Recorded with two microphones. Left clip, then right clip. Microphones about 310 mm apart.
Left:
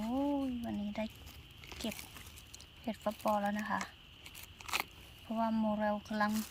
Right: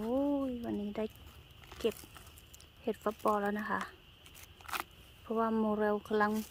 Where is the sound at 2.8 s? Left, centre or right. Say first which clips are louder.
Right 3 dB; centre.